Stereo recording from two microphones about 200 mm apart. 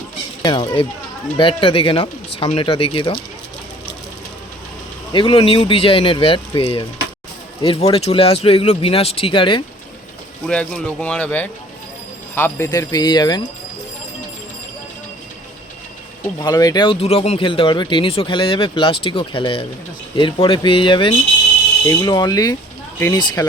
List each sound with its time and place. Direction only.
0.4 s speech: 25° left (ahead or behind)
5.1 s speech: 25° left (ahead or behind)
10.4 s speech: 5° left (ahead or behind); by 13.4 s 20° left (ahead or behind)
16.2 s speech: 20° left (ahead or behind)